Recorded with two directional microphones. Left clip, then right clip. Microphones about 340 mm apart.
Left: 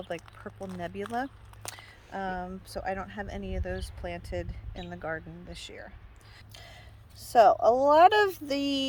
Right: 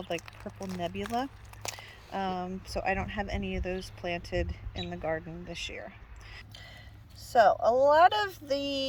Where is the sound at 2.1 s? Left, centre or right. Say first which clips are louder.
Right 1 dB; left.